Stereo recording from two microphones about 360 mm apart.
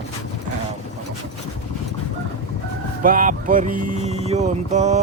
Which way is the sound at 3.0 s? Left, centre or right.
Right.